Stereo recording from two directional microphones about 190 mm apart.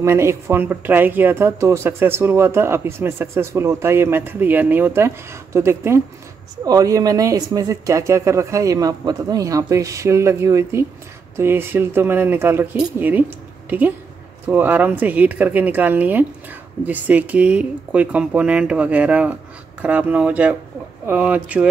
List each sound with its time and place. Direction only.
0.0 s a woman's voice: 15° right (ahead or behind)